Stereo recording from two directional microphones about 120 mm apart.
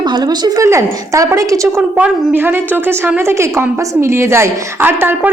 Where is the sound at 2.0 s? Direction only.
15° right (ahead or behind).